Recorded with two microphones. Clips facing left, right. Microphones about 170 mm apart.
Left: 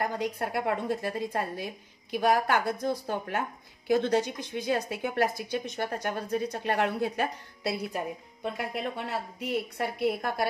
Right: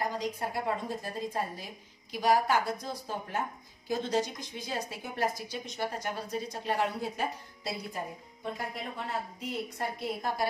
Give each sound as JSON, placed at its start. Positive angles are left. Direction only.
{"t": 0.0, "sound": "a woman's voice", "side_deg": 60}